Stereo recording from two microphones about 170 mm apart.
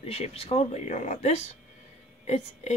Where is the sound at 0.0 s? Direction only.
35° left (ahead or behind).